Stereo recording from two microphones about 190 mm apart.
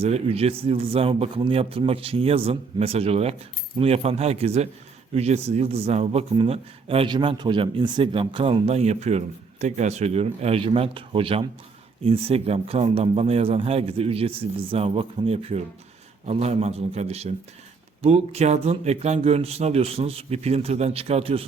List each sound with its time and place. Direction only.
0.0 s a man's voice: 30° right (ahead or behind)